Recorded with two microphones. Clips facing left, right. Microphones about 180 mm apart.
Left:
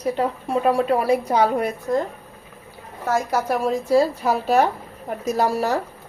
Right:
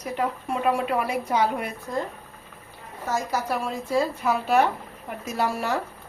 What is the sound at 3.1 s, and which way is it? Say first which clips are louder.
Speech: left 5 dB; 50° left (ahead or behind).